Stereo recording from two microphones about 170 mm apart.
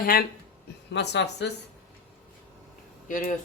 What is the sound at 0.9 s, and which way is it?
Speech, 90° left.